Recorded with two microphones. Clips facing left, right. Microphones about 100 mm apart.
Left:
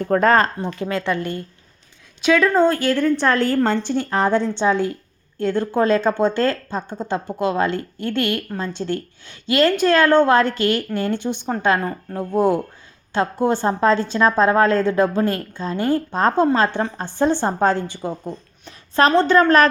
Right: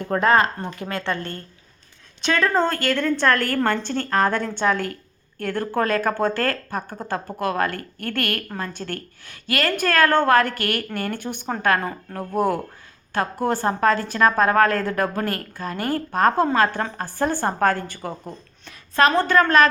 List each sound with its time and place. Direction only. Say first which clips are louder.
0.0 s a woman's voice: left 3 dB; 40° left (ahead or behind)
1.0 s a woman's voice: left 4 dB; 15° left (ahead or behind)
2.2 s a woman's voice: left 5 dB; 5° left (ahead or behind); by 11.4 s 20° left (ahead or behind)
11.8 s speech: left 3 dB; 5° right (ahead or behind)
12.1 s a woman's voice: left 4 dB; 20° left (ahead or behind)
18.6 s a woman's voice: left 2 dB; 30° left (ahead or behind)